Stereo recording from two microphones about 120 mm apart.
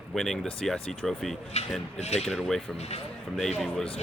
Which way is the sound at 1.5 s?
60° left (ahead or behind).